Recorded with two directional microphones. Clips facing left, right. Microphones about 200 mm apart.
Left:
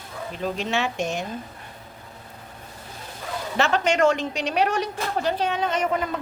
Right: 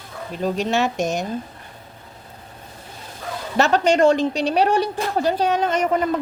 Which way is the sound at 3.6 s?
35° right (ahead or behind).